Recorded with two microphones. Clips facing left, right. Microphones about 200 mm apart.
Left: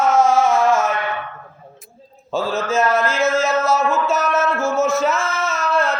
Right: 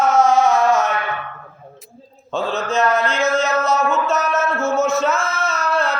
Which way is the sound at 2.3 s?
5° left (ahead or behind).